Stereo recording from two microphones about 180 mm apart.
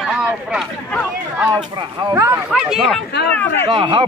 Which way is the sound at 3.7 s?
30° right (ahead or behind).